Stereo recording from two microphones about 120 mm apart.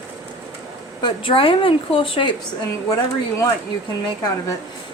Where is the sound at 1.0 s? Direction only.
45° left (ahead or behind).